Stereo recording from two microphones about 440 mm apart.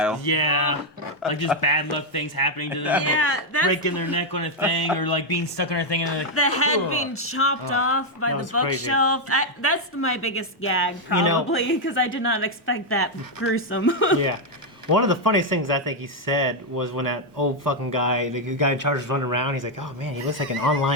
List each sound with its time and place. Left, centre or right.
0.3 s speech: left
1.2 s speech: centre
1.6 s speech: left
3.0 s a woman's voice: left
3.7 s speech: left
6.3 s a woman's voice: left
11.1 s speech: right
11.5 s speech: left
14.8 s speech: right